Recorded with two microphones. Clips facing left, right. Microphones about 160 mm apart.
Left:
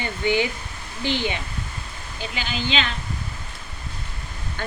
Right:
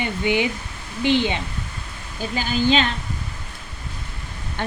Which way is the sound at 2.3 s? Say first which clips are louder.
Right 7 dB; 40° right (ahead or behind).